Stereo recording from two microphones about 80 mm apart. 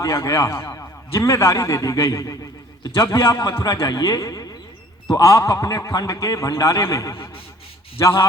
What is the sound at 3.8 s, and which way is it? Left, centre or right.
A man's voice, left.